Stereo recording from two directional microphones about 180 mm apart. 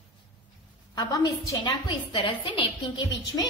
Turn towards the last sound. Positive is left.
turn(degrees=25)  # may be behind; listen again after turning